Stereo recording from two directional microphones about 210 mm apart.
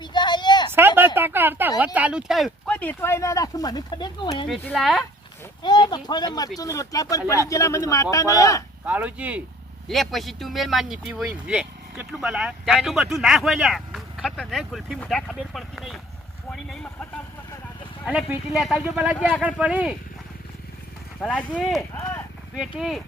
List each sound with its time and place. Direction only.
0.0 s a sound: 20° left (ahead or behind)
0.7 s a sound: 10° right (ahead or behind)
1.8 s speech: 5° right (ahead or behind); by 4.4 s 20° left (ahead or behind)
4.4 s speech: centre (ahead or behind)
5.6 s speech: 20° left (ahead or behind)
8.9 s speech: 5° right (ahead or behind)
21.2 s speech: 5° left (ahead or behind)